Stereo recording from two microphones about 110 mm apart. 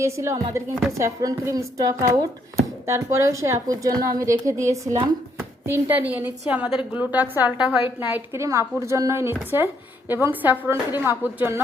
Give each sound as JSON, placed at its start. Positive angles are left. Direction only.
{"t": 0.0, "sound": "a woman's voice", "side_deg": -25}
{"t": 7.9, "sound": "a woman's voice", "side_deg": -20}